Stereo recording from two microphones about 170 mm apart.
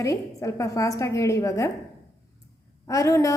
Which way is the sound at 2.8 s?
20° left (ahead or behind).